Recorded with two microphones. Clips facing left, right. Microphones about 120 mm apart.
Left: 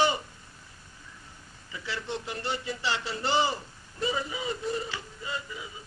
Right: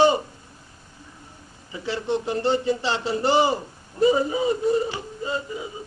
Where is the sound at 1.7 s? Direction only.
25° right (ahead or behind).